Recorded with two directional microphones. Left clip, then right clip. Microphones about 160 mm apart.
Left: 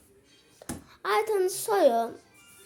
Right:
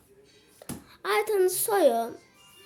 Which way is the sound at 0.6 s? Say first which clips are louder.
Left 1 dB; 10° right (ahead or behind).